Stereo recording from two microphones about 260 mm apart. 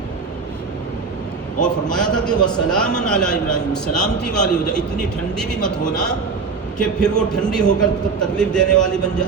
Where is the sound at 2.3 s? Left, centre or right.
Centre.